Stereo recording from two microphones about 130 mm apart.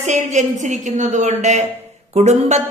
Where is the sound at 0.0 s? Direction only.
65° right (ahead or behind).